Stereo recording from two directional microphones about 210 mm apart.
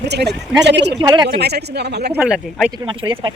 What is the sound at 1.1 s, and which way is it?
Speech, 20° right (ahead or behind).